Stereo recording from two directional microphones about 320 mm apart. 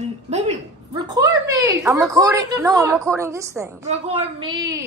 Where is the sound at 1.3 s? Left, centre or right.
Centre.